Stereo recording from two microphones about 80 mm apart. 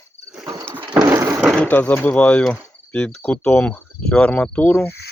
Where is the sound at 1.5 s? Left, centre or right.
Centre.